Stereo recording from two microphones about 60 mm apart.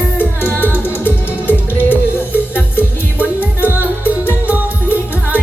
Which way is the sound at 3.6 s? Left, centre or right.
Right.